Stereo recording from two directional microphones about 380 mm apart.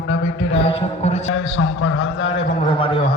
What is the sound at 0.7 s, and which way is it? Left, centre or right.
Speech, centre.